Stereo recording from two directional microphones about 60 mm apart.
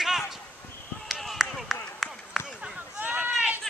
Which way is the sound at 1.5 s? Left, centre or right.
Centre.